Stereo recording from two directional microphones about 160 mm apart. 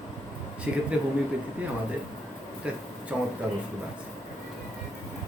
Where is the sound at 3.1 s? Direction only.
5° right (ahead or behind).